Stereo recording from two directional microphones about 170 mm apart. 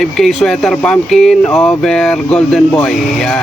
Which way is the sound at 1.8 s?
5° left (ahead or behind).